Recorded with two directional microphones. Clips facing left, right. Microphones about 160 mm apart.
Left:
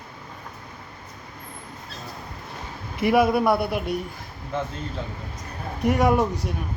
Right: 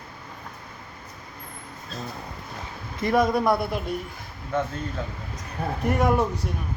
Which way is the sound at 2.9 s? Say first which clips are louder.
Left 2 dB; 10° left (ahead or behind).